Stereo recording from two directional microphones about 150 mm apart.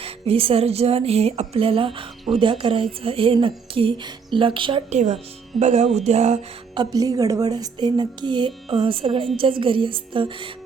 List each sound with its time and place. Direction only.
0.0 s speech: 40° right (ahead or behind)
4.9 s speech: 45° right (ahead or behind)
6.7 s speech: 25° right (ahead or behind)